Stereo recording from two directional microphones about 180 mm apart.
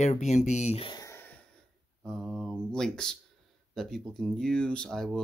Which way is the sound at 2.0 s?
Centre (ahead or behind).